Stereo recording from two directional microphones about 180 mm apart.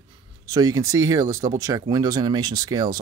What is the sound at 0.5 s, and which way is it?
Speech, 20° right (ahead or behind).